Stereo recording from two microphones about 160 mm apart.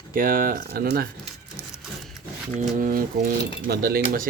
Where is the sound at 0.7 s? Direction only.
75° right (ahead or behind).